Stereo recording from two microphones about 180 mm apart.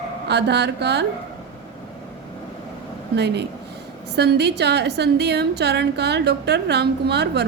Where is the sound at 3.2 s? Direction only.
70° right (ahead or behind).